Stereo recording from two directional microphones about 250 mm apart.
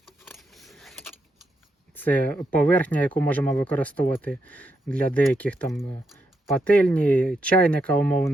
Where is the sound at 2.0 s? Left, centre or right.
Centre.